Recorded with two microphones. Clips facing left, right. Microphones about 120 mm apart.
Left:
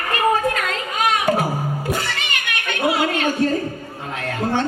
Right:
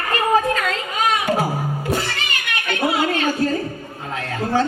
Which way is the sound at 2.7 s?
35° right (ahead or behind).